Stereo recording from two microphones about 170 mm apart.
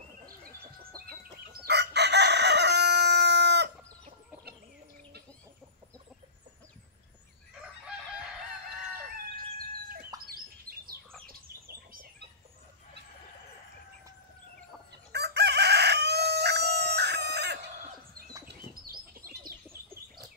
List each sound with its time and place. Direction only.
1.7 s crowing: 80° right
10.1 s fowl: 20° right (ahead or behind)
10.7 s bird: 60° right (ahead or behind)
11.2 s chicken: 60° right (ahead or behind)
15.1 s chicken: 75° right (ahead or behind)
18.9 s bird: 60° right (ahead or behind)